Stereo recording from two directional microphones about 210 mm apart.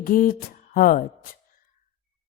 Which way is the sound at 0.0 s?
40° left (ahead or behind).